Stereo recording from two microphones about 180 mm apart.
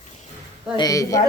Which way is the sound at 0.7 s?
20° left (ahead or behind).